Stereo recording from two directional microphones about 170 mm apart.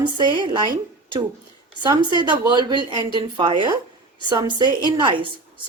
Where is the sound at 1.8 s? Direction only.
25° right (ahead or behind).